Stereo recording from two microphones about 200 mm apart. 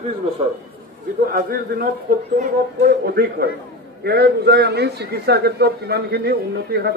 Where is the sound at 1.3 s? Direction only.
45° right (ahead or behind).